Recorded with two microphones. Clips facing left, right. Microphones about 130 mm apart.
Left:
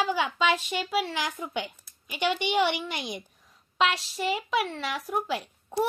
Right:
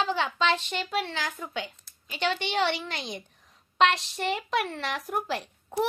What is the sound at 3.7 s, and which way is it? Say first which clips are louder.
A woman's voice: right 3 dB; 5° left (ahead or behind).